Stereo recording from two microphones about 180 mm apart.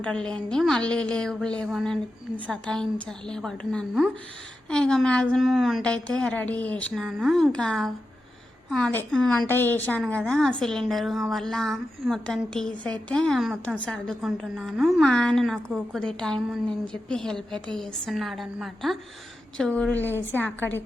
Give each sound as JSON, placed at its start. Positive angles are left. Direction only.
{"t": 0.0, "sound": "a woman's voice", "side_deg": 5}